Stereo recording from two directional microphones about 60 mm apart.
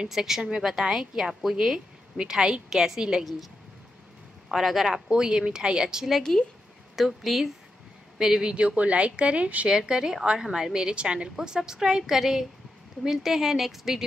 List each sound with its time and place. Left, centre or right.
0.1 s a woman's voice: centre
4.5 s a woman's voice: centre; by 9.7 s right
9.7 s a woman's voice: centre